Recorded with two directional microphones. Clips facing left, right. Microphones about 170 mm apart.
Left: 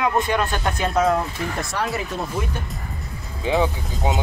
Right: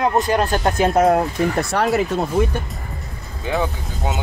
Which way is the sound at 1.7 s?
65° right (ahead or behind).